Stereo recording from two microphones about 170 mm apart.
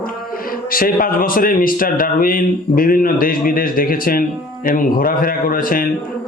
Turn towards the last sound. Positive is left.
turn(degrees=55)  # may be behind; listen again after turning